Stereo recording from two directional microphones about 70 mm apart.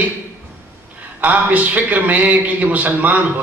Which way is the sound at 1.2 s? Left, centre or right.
Right.